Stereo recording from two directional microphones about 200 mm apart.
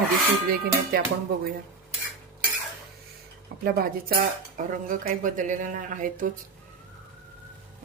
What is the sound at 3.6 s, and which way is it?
Speech, 50° right (ahead or behind).